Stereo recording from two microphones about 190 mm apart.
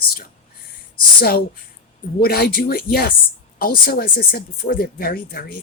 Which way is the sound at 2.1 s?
55° left (ahead or behind).